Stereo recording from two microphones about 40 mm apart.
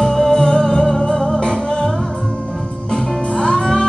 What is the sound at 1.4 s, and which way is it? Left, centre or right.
Music, centre.